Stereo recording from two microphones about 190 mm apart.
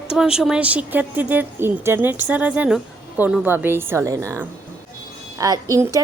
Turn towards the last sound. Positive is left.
turn(degrees=-15)  # may be behind; listen again after turning